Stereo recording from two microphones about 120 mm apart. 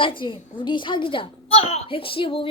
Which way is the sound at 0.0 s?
45° left (ahead or behind).